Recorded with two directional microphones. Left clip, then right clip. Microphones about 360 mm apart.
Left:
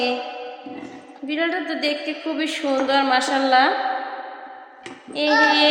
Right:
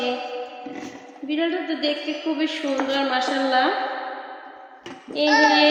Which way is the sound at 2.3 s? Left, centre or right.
Left.